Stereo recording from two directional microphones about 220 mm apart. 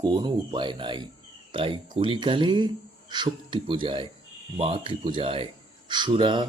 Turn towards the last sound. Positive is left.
turn(degrees=-20)  # may be behind; listen again after turning